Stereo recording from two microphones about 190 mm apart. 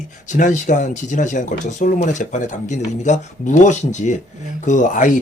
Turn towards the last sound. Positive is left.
turn(degrees=40)  # may be behind; listen again after turning